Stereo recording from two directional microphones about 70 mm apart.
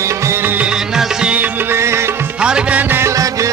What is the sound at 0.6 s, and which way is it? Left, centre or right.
Music, centre.